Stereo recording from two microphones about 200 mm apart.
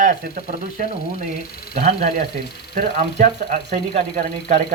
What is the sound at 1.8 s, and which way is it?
Speech, 45° right (ahead or behind).